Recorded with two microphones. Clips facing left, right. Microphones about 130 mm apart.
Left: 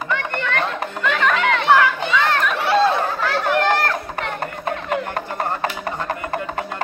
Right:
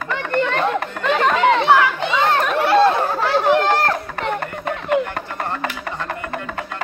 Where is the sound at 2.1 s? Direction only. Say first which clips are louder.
Right 4 dB; 30° right (ahead or behind).